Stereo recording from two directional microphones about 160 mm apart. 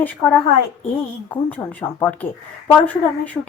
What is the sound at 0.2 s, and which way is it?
Speech, 10° left (ahead or behind).